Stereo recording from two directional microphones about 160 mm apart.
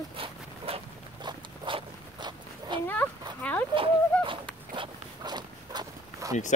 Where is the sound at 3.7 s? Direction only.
30° right (ahead or behind).